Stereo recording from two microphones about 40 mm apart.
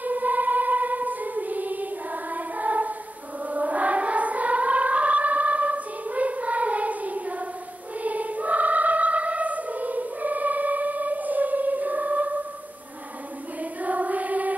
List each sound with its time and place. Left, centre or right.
0.0 s choir: right
3.4 s a sound: right
8.0 s choir: right
13.6 s choir: right